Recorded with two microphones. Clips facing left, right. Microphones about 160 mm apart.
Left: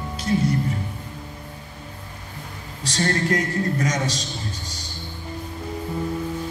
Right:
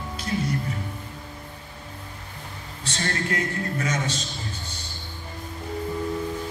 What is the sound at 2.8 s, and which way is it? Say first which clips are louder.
A man's voice: left 6 dB; 40° left (ahead or behind).